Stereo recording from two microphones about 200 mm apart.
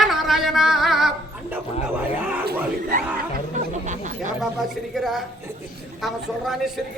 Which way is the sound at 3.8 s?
35° right (ahead or behind).